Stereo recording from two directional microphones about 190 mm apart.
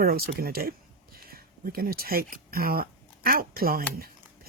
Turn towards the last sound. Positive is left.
turn(degrees=-50)  # may be behind; listen again after turning